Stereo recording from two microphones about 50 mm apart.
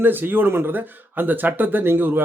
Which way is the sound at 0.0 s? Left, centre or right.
Right.